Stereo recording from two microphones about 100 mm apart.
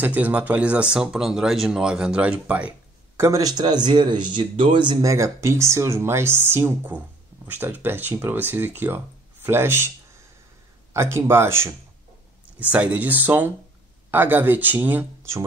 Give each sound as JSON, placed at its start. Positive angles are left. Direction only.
{"t": 0.0, "sound": "speech", "side_deg": -15}
{"t": 3.2, "sound": "speech", "side_deg": -30}
{"t": 5.0, "sound": "speech", "side_deg": -30}
{"t": 10.9, "sound": "speech", "side_deg": -25}
{"t": 12.5, "sound": "speech", "side_deg": -15}